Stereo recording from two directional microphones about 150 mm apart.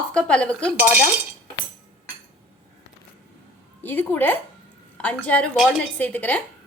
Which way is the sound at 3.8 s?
10° left (ahead or behind).